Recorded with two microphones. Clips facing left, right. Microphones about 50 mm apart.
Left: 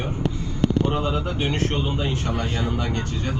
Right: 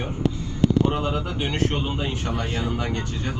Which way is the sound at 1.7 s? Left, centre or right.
Right.